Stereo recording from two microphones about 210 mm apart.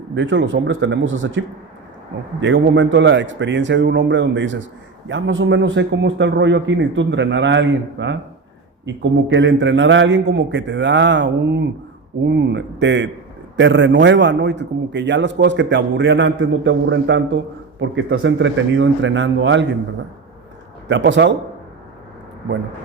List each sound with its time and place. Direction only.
0.2 s a man's voice: 60° right (ahead or behind)
20.8 s a man's voice: 60° right (ahead or behind)